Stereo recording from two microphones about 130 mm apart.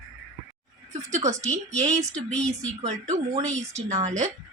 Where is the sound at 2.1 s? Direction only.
5° left (ahead or behind).